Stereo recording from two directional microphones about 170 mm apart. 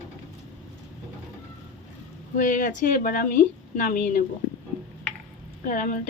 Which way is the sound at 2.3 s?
50° left (ahead or behind).